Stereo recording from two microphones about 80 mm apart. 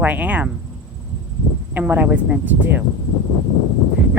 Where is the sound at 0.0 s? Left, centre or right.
Centre.